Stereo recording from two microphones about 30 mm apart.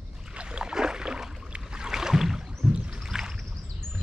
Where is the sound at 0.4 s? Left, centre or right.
Right.